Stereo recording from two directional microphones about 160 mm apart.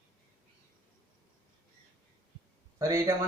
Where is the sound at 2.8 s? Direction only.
20° right (ahead or behind).